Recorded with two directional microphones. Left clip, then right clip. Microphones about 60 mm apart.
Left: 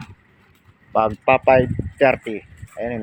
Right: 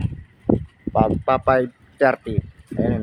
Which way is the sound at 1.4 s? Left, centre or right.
Centre.